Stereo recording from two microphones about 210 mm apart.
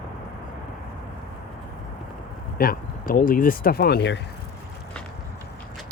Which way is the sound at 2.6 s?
45° left (ahead or behind).